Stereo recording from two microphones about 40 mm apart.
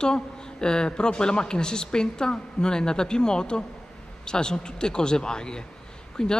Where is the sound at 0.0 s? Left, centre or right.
Centre.